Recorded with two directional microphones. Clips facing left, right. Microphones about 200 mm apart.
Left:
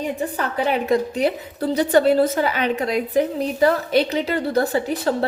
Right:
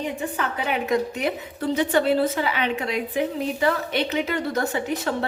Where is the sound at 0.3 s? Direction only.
35° left (ahead or behind).